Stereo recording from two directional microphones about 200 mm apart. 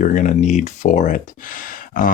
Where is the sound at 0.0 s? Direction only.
40° left (ahead or behind).